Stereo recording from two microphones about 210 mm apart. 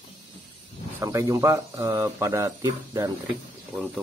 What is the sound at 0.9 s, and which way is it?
Speech, 15° right (ahead or behind).